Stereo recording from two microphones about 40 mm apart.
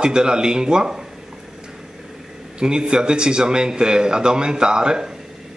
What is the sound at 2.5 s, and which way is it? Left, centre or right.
A man's voice, right.